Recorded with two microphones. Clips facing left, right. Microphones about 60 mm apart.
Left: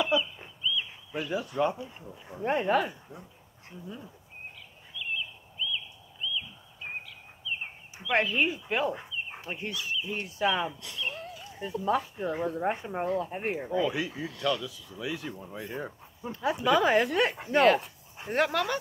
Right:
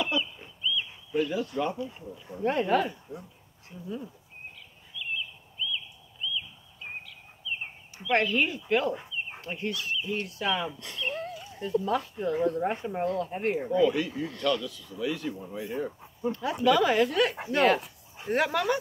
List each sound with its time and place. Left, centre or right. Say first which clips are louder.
0.7 s bird: right 1 dB; centre
2.1 s speech: right 1 dB; centre
2.8 s speech: right 2 dB; centre
4.9 s bird: even; centre
6.3 s bird: even; centre
8.0 s speech: right 1 dB; centre
11.0 s a sound: right 4 dB; centre
11.5 s speech: right 1 dB; centre
16.3 s a woman's voice: right 2 dB; centre
17.6 s speech: left 2 dB; centre